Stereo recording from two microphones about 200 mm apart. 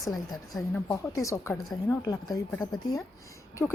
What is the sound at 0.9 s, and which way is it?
Speech, 15° left (ahead or behind).